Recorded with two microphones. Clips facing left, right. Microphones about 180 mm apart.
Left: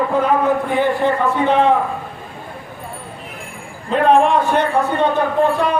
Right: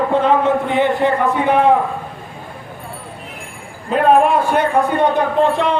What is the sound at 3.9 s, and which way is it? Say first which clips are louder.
A man's voice: right 1 dB; 5° right (ahead or behind).